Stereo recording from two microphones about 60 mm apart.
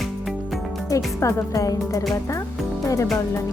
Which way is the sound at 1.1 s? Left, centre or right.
Left.